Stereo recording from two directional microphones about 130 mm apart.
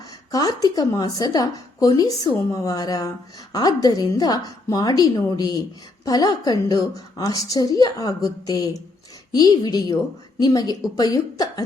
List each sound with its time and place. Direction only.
0.3 s speech: 30° left (ahead or behind)